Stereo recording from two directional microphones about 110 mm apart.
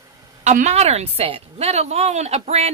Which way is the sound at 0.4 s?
90° right.